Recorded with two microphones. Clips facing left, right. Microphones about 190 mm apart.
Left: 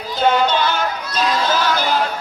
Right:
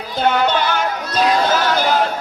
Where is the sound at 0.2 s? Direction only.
55° right (ahead or behind).